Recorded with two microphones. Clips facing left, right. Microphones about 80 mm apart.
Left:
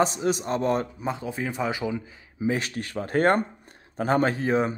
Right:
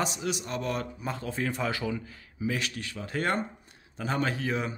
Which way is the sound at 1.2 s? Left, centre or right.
Centre.